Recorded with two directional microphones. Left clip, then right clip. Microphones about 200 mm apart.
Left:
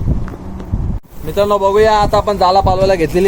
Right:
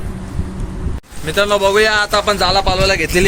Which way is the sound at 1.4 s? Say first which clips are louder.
Left 1 dB; 10° left (ahead or behind).